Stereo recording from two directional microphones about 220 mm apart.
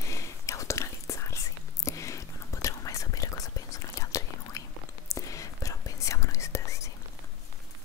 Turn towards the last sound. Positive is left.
turn(degrees=15)  # may be behind; listen again after turning